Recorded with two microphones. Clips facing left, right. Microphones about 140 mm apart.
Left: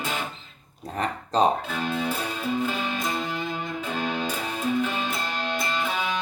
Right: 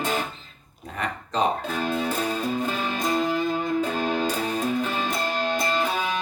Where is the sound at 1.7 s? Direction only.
40° right (ahead or behind).